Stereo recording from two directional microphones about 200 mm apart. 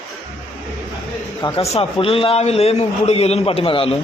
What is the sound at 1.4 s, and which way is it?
A man's voice, 30° left (ahead or behind).